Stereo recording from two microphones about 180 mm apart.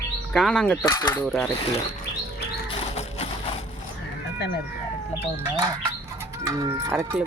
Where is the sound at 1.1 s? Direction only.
5° left (ahead or behind).